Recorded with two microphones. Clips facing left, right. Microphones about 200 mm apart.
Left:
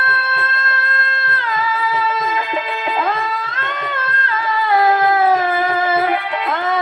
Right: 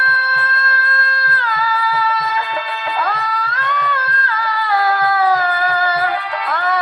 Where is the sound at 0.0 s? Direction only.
20° left (ahead or behind).